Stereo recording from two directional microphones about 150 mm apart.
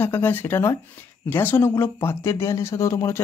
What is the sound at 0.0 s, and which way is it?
Speech, 15° left (ahead or behind).